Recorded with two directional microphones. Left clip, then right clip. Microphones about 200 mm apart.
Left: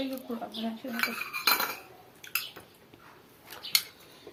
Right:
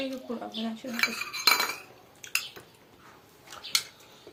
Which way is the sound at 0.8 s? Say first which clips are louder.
Even; 65° right (ahead or behind).